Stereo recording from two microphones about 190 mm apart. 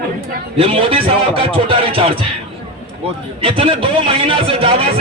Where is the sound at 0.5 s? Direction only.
30° right (ahead or behind).